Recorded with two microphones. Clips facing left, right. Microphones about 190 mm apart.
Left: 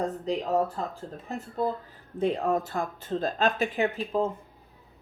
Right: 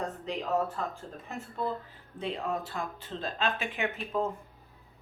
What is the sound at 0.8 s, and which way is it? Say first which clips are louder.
Speech: left 2 dB; 35° left (ahead or behind).